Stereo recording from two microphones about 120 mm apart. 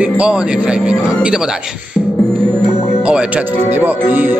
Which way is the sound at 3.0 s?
10° right (ahead or behind).